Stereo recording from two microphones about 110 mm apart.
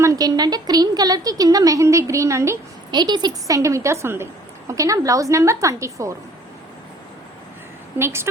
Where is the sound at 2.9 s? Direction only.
40° right (ahead or behind).